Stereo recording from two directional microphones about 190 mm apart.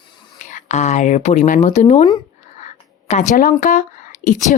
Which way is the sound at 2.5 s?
40° left (ahead or behind).